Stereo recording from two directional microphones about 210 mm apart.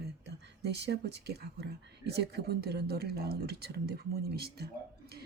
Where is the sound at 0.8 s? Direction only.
55° right (ahead or behind).